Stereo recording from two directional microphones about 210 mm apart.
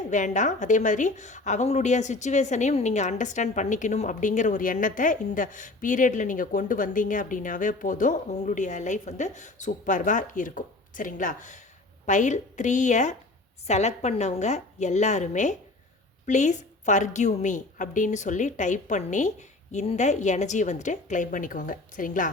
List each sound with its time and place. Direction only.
0.1 s a woman's voice: 35° left (ahead or behind)